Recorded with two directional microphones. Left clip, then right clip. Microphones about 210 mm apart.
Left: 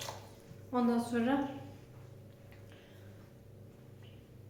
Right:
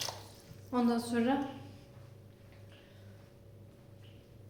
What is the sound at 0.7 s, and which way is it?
Speech, 40° right (ahead or behind).